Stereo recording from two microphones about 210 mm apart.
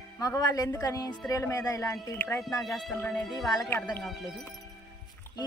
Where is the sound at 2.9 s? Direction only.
15° left (ahead or behind).